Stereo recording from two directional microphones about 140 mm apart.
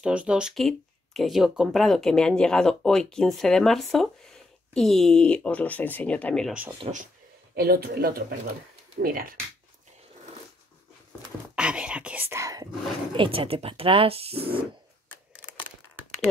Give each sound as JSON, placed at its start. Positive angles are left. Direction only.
{"t": 0.0, "sound": "speech", "side_deg": -10}
{"t": 6.8, "sound": "speech", "side_deg": -50}
{"t": 7.5, "sound": "speech", "side_deg": -90}
{"t": 11.5, "sound": "whispering", "side_deg": -5}
{"t": 13.1, "sound": "speech", "side_deg": -40}